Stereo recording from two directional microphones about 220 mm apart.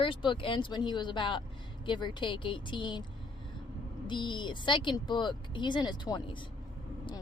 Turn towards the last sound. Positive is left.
turn(degrees=20)  # may be behind; listen again after turning